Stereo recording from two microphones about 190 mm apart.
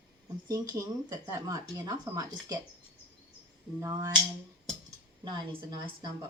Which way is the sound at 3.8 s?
15° right (ahead or behind).